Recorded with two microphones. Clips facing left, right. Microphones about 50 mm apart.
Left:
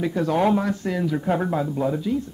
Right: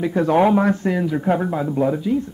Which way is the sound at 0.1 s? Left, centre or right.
Right.